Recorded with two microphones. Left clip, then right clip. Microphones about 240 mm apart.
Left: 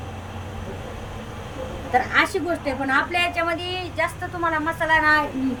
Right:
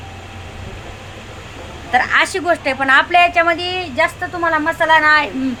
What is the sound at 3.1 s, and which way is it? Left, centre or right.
Speech, centre.